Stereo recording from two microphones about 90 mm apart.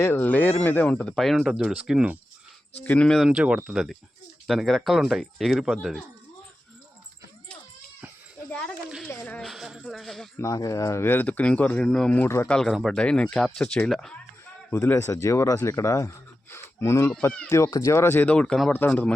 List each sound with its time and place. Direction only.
0.0 s speech: 20° left (ahead or behind); by 2.1 s 10° right (ahead or behind)
2.8 s speech: 15° left (ahead or behind)
3.2 s speech: 10° right (ahead or behind)
9.0 s speech: 15° left (ahead or behind)
9.4 s speech: 5° right (ahead or behind)
10.3 s speech: 35° left (ahead or behind)
11.0 s speech: 20° left (ahead or behind); by 13.0 s centre (ahead or behind)
13.0 s speech: 10° left (ahead or behind)
14.7 s speech: 25° left (ahead or behind)